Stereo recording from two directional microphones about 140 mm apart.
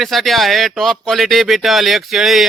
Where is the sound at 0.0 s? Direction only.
Centre (ahead or behind).